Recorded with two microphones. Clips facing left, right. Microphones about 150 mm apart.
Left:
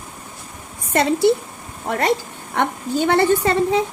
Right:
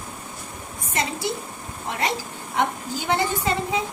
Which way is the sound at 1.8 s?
55° left (ahead or behind).